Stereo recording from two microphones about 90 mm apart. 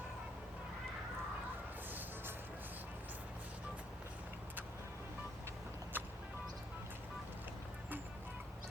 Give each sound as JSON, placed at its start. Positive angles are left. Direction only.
{"t": 5.9, "sound": "vehicle", "side_deg": -20}